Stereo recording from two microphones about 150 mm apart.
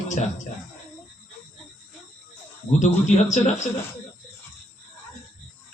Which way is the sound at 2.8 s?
50° left (ahead or behind).